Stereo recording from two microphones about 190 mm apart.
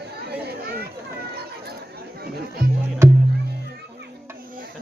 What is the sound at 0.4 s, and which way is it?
Children playing, 55° right (ahead or behind).